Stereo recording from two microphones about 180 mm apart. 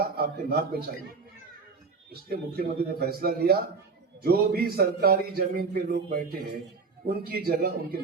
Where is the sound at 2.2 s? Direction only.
60° right (ahead or behind).